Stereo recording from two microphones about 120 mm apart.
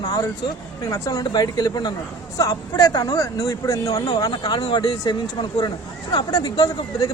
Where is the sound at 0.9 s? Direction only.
25° left (ahead or behind).